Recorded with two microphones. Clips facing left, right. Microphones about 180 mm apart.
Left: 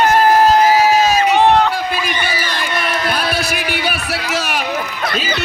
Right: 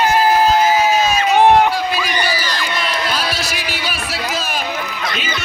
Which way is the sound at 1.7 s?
50° left (ahead or behind).